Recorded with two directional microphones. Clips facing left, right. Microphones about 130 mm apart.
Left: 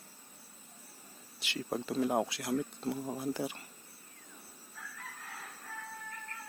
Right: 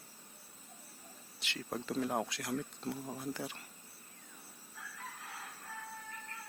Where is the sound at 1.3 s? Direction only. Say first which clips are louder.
Left 5 dB; 5° left (ahead or behind).